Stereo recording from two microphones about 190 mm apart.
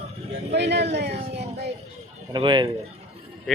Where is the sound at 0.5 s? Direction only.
60° right (ahead or behind).